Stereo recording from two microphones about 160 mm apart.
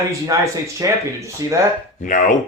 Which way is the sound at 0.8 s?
20° right (ahead or behind).